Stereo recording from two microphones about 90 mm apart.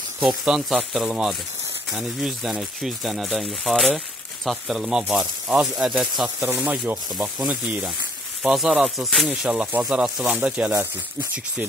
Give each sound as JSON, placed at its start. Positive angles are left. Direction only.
{"t": 0.2, "sound": "speech", "side_deg": -5}
{"t": 6.2, "sound": "speech", "side_deg": -15}
{"t": 9.5, "sound": "speech", "side_deg": -15}